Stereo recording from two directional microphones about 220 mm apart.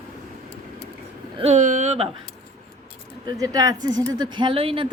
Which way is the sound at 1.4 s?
35° right (ahead or behind).